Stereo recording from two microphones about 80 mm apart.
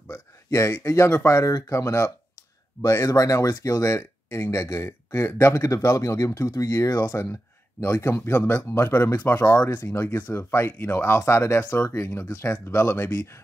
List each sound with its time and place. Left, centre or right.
0.6 s speech: left
5.5 s speech: left
9.9 s speech: left